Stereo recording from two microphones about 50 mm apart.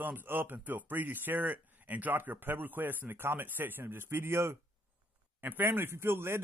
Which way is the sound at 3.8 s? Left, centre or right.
Right.